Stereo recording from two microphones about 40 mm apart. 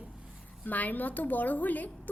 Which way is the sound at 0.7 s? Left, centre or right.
Left.